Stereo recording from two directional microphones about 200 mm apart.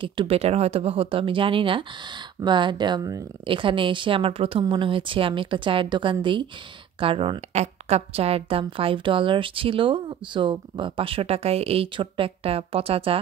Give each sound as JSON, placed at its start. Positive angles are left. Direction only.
{"t": 0.0, "sound": "a woman's voice", "side_deg": -25}